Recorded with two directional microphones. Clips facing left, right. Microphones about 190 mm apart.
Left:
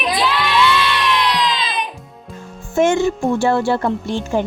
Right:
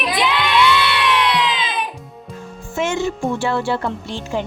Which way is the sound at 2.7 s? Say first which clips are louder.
Left 6 dB; 50° left (ahead or behind).